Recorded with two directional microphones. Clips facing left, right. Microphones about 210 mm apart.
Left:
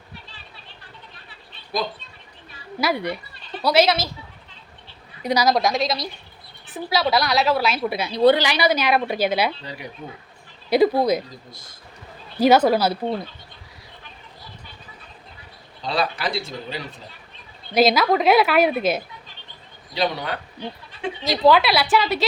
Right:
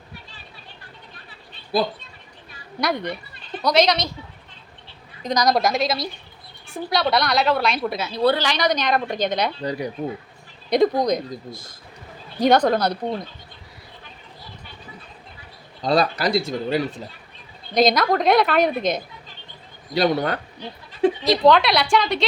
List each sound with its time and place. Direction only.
2.8 s a woman's voice: 10° left (ahead or behind)
5.2 s a woman's voice: 10° left (ahead or behind)
9.6 s speech: 35° right (ahead or behind)
10.7 s a woman's voice: 5° left (ahead or behind)
12.4 s a woman's voice: 5° left (ahead or behind)
15.8 s speech: 45° right (ahead or behind)
17.7 s a woman's voice: 5° left (ahead or behind)
19.9 s speech: 50° right (ahead or behind)
21.2 s a woman's voice: 5° left (ahead or behind)